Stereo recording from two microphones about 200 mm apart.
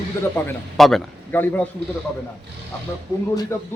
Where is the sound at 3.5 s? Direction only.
15° left (ahead or behind).